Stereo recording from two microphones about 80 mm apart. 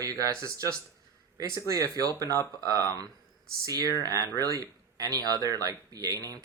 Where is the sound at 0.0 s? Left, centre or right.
Right.